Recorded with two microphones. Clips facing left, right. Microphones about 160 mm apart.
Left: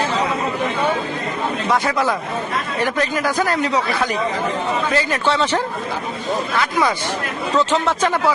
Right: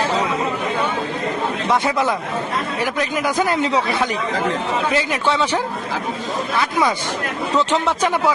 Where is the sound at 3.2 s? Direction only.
20° right (ahead or behind).